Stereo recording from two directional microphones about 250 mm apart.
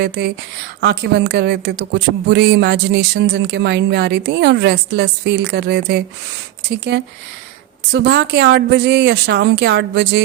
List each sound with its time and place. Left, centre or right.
0.0 s speech: right